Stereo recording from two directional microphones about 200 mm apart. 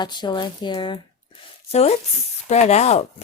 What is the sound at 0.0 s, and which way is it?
A woman's voice, 20° left (ahead or behind).